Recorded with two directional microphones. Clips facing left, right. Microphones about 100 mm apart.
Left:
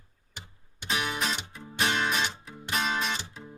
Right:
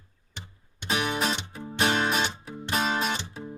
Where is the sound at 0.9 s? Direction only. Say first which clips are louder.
Right 3 dB; 30° right (ahead or behind).